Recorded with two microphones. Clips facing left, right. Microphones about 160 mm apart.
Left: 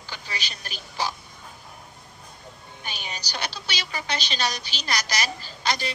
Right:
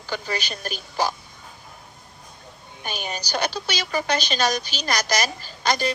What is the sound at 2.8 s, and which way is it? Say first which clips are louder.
A woman's voice: right 6 dB; 45° right (ahead or behind).